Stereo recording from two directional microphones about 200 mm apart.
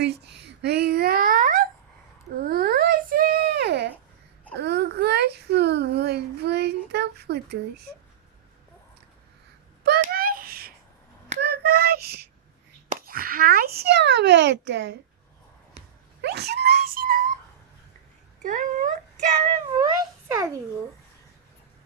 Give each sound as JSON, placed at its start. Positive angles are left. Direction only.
{"t": 0.0, "sound": "a sound", "side_deg": -55}
{"t": 9.8, "sound": "a sound", "side_deg": -50}
{"t": 12.9, "sound": "a child's voice", "side_deg": -45}
{"t": 16.2, "sound": "wail", "side_deg": -55}
{"t": 18.4, "sound": "speech", "side_deg": -40}
{"t": 19.8, "sound": "a child's voice", "side_deg": -15}